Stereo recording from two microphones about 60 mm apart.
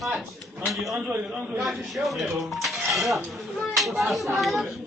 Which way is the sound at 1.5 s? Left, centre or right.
Centre.